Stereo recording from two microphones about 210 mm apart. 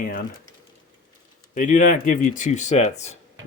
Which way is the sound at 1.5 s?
35° left (ahead or behind).